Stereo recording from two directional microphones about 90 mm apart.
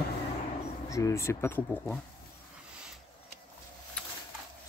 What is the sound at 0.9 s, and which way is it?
Speech, 40° left (ahead or behind).